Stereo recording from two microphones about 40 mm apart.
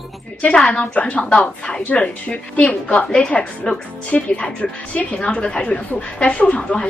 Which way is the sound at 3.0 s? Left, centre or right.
Left.